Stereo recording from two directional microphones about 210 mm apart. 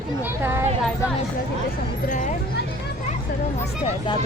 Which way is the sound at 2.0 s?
40° left (ahead or behind).